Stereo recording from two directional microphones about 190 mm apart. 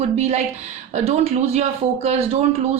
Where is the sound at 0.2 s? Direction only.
35° right (ahead or behind).